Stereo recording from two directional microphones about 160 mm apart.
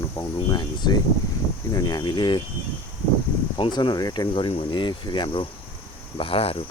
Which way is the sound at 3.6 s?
30° left (ahead or behind).